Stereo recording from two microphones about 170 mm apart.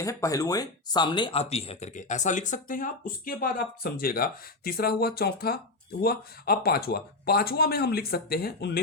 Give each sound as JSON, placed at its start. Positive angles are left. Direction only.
{"t": 0.0, "sound": "speech", "side_deg": 20}